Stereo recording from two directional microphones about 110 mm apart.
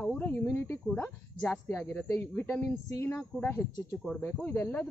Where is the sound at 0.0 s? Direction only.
15° left (ahead or behind).